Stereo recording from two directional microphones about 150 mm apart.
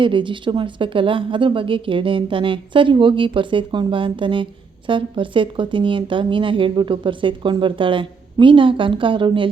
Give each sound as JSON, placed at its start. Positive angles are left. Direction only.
{"t": 0.0, "sound": "a woman's voice", "side_deg": -35}